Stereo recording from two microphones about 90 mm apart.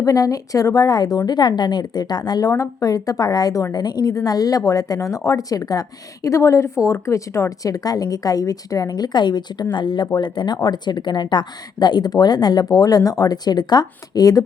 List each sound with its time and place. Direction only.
0.0 s a woman's voice: 40° left (ahead or behind)